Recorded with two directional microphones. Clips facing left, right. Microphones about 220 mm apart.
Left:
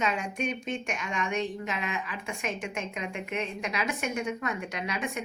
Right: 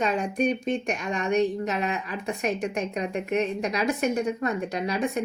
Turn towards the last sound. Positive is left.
turn(degrees=-35)  # may be behind; listen again after turning